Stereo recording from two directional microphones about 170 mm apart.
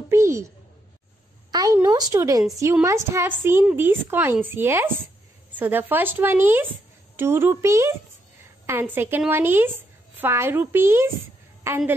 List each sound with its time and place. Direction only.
0.1 s a sound: 15° right (ahead or behind)
1.5 s a woman's voice: 25° right (ahead or behind)
8.9 s a woman's voice: 10° right (ahead or behind)